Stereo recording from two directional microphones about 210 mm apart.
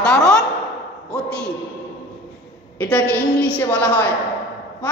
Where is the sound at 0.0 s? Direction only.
5° left (ahead or behind).